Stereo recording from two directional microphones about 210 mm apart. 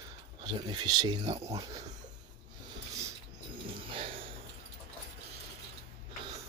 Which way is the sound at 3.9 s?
25° right (ahead or behind).